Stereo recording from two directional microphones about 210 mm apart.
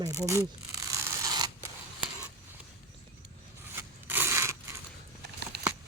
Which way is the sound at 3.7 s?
10° right (ahead or behind).